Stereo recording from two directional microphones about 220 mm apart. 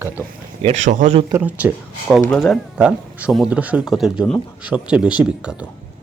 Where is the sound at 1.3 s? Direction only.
5° right (ahead or behind).